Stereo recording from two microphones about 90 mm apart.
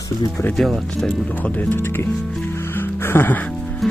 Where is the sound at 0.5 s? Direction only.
5° left (ahead or behind).